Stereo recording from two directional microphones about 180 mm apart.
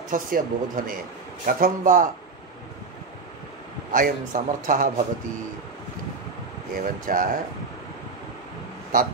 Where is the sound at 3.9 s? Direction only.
50° right (ahead or behind).